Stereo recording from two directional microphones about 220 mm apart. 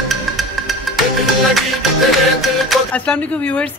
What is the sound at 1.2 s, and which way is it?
Speech, centre (ahead or behind).